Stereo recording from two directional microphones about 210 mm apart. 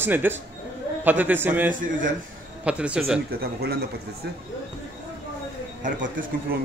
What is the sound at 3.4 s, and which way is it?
Speech, 50° right (ahead or behind).